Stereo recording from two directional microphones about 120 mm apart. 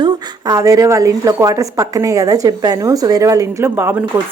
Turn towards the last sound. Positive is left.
turn(degrees=-20)  # may be behind; listen again after turning